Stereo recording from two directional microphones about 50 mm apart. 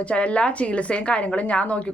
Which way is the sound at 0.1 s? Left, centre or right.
Left.